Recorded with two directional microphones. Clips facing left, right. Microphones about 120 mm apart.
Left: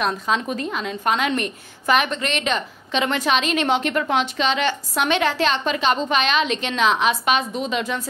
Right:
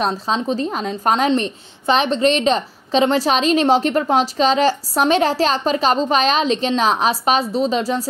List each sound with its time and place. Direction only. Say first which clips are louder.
0.0 s a woman's voice: right 2 dB; 30° right (ahead or behind)